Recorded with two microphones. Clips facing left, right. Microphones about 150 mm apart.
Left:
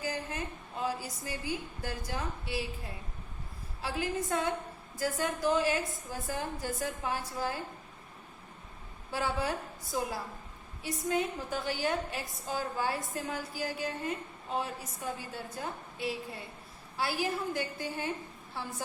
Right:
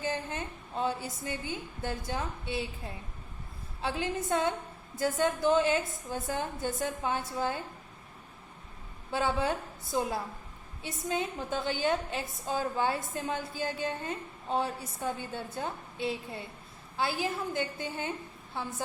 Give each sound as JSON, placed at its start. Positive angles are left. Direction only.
{"t": 0.0, "sound": "a woman's voice", "side_deg": -25}
{"t": 9.1, "sound": "a woman's voice", "side_deg": -20}